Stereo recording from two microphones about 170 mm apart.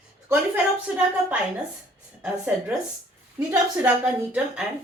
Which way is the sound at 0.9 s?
5° right (ahead or behind).